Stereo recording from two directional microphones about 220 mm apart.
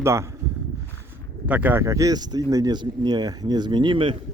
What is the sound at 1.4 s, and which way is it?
Speech, 5° right (ahead or behind).